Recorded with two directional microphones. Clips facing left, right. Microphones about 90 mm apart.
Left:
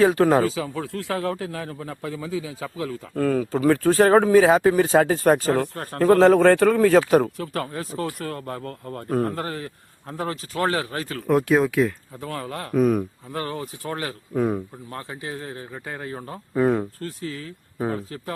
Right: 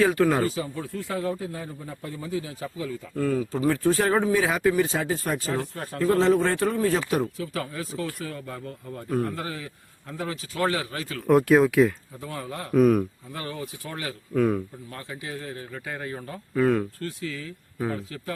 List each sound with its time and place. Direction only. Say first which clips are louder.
0.0 s speech: left 4 dB; 35° left (ahead or behind)
0.4 s speech: left 3 dB; 90° left
3.2 s speech: left 4 dB; 60° left (ahead or behind)
7.1 s a man's voice: left 7 dB; 50° left (ahead or behind)
8.0 s a man's voice: left 4 dB; 55° left (ahead or behind)
11.3 s speech: right 1 dB; centre (ahead or behind)
12.2 s speech: left 3 dB; 65° left (ahead or behind)
12.7 s speech: right 1 dB; centre (ahead or behind)
13.3 s a man's voice: left 7 dB; 45° left (ahead or behind)
14.3 s speech: even; 20° left (ahead or behind)
14.9 s speech: left 3 dB; 35° left (ahead or behind)